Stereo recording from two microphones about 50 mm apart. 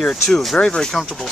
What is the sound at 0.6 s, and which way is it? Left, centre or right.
Speech, centre.